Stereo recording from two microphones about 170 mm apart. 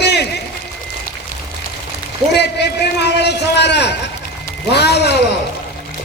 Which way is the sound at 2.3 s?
80° left.